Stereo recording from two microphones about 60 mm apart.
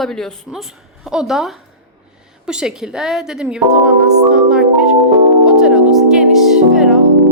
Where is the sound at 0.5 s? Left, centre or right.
Centre.